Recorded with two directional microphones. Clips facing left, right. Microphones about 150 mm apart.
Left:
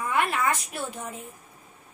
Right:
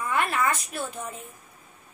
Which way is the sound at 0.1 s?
15° left (ahead or behind).